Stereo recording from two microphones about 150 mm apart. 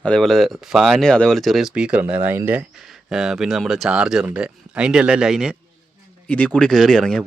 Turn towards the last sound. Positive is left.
turn(degrees=5)  # may be behind; listen again after turning